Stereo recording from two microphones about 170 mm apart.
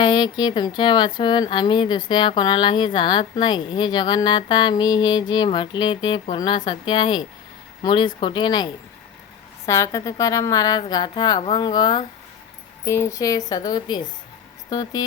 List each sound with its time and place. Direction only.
0.0 s a woman's voice: 25° left (ahead or behind)